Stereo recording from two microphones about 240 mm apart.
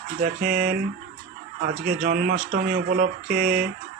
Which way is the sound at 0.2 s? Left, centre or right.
Right.